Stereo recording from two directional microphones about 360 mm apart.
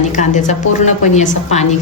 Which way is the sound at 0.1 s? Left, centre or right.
Centre.